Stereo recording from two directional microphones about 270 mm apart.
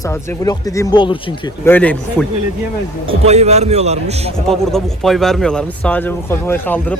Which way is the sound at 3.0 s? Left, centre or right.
Right.